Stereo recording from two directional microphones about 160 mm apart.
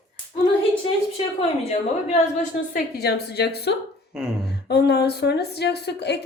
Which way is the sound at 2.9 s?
90° left.